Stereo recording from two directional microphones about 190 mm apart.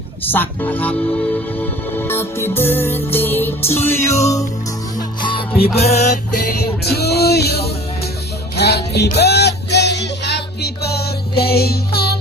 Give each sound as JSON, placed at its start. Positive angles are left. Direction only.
{"t": 0.3, "sound": "music", "side_deg": 10}
{"t": 4.9, "sound": "music", "side_deg": 25}
{"t": 6.8, "sound": "music", "side_deg": 60}